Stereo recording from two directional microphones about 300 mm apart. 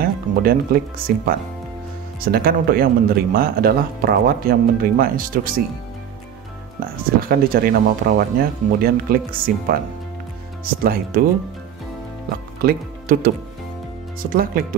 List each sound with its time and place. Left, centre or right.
0.0 s speech: right
7.2 s speech: right
12.6 s speech: right